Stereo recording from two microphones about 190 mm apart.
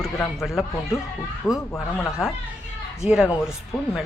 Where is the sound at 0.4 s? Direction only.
Centre (ahead or behind).